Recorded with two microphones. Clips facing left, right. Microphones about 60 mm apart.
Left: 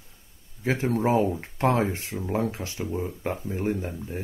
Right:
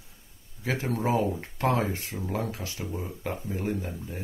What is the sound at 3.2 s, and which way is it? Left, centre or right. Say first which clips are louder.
Speech: left 2 dB; left.